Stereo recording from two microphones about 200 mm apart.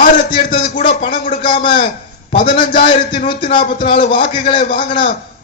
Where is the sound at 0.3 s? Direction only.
40° left (ahead or behind).